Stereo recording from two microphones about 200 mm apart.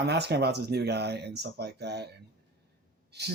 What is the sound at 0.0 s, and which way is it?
Speech, 55° right (ahead or behind).